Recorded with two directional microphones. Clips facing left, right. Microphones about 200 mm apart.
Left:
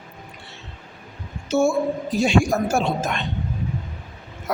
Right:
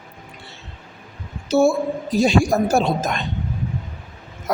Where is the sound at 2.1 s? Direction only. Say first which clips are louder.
Right 3 dB; 35° right (ahead or behind).